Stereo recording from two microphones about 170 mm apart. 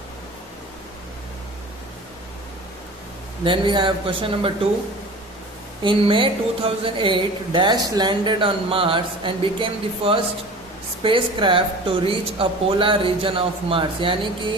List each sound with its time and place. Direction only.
3.4 s a man's voice: 30° right (ahead or behind)
5.8 s speech: 30° right (ahead or behind)